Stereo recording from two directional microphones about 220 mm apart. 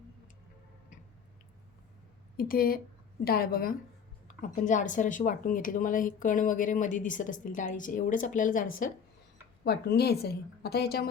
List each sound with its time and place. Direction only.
2.3 s a woman's voice: 40° left (ahead or behind)